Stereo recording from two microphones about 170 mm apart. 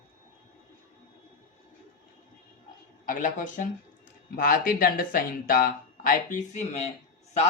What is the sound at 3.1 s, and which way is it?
Speech, 50° left (ahead or behind).